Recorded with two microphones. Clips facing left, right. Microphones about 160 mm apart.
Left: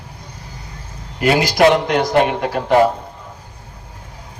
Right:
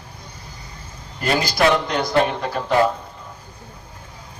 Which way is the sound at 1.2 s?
70° left (ahead or behind).